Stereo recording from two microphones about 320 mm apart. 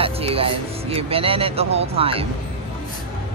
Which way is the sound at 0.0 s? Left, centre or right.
Centre.